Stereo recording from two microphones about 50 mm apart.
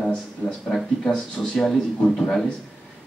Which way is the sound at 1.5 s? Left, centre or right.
Centre.